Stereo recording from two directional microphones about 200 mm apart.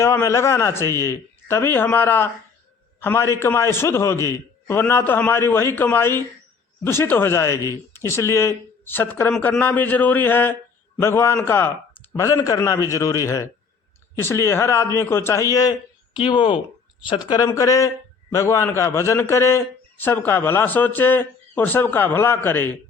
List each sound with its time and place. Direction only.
0.0 s speech: 15° left (ahead or behind)
16.1 s speech: 25° left (ahead or behind)